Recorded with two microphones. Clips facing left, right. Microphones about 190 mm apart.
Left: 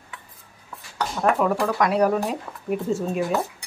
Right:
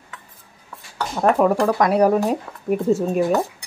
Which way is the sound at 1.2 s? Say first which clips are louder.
Right 5 dB; 40° right (ahead or behind).